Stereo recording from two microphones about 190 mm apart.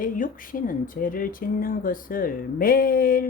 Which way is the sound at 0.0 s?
45° left (ahead or behind).